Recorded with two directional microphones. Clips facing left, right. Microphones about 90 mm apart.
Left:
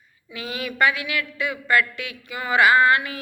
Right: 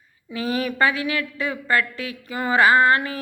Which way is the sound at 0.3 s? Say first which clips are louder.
Right 3 dB; 35° right (ahead or behind).